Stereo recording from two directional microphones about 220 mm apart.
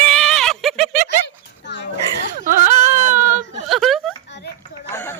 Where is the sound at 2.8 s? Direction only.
35° right (ahead or behind).